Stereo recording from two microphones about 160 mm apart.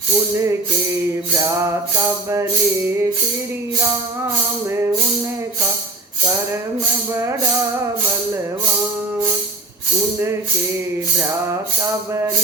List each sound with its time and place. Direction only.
1.5 s music: 20° right (ahead or behind)
7.1 s music: 15° right (ahead or behind)
11.8 s music: 20° right (ahead or behind)